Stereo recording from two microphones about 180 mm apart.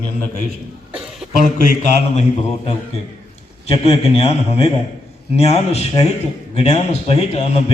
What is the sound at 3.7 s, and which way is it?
A man's voice, 35° left (ahead or behind).